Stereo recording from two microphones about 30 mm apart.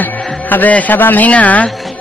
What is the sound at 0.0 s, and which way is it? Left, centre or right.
Speech, left.